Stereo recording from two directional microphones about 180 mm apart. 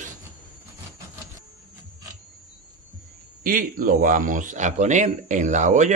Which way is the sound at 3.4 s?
50° right (ahead or behind).